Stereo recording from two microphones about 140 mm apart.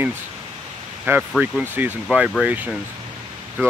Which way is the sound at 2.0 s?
5° right (ahead or behind).